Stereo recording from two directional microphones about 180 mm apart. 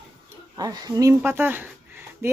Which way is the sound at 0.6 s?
20° right (ahead or behind).